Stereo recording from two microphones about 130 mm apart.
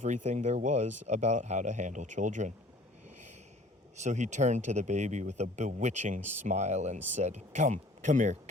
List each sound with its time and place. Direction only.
0.0 s speech: 70° right (ahead or behind)
4.0 s speech: 65° right (ahead or behind)